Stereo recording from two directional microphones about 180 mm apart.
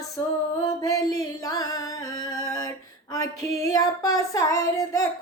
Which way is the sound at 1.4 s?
20° left (ahead or behind).